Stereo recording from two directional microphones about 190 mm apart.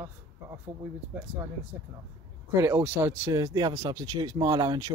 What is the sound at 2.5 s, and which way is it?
Speech, 15° right (ahead or behind).